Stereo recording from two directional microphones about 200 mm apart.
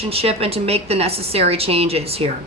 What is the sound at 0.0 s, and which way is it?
Speech, 30° right (ahead or behind).